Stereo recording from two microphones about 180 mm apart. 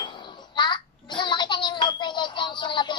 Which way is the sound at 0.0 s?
25° left (ahead or behind).